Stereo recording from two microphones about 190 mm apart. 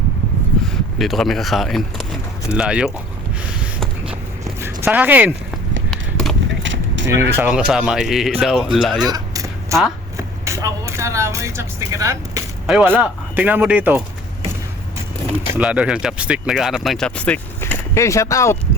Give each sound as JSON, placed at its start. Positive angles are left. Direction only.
{"t": 0.9, "sound": "speech", "side_deg": 0}
{"t": 4.6, "sound": "speech", "side_deg": -10}
{"t": 5.9, "sound": "a sound", "side_deg": 0}
{"t": 6.6, "sound": "a sound", "side_deg": -75}
{"t": 7.3, "sound": "speech", "side_deg": -5}
{"t": 9.0, "sound": "vehicle", "side_deg": -20}
{"t": 12.6, "sound": "speech", "side_deg": -5}
{"t": 15.5, "sound": "speech", "side_deg": -5}